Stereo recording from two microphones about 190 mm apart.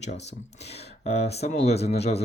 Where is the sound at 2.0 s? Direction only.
35° left (ahead or behind).